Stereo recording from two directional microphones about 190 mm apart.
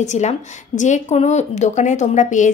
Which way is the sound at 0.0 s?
40° left (ahead or behind).